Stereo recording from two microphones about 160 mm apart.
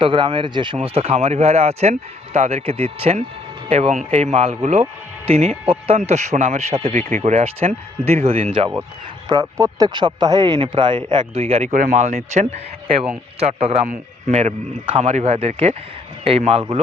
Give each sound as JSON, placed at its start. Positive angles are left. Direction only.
{"t": 0.0, "sound": "speech", "side_deg": -35}
{"t": 9.3, "sound": "speech", "side_deg": -20}